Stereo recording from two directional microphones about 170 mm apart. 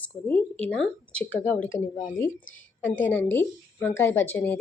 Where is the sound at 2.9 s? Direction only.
90° left.